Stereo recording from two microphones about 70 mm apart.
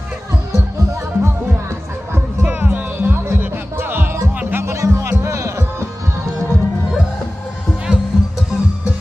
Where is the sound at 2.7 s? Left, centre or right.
Right.